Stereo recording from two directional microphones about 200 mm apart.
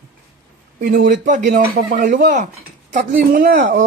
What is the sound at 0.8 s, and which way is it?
Speech, 45° right (ahead or behind).